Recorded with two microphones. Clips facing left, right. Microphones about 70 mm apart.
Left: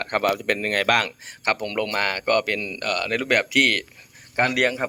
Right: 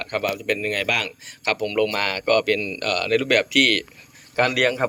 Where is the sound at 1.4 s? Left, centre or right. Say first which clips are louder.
Right 3 dB; left.